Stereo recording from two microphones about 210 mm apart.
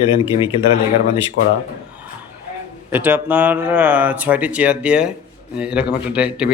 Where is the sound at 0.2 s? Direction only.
25° left (ahead or behind).